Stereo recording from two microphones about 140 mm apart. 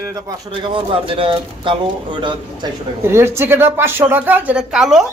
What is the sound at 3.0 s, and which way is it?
Speech, 20° right (ahead or behind).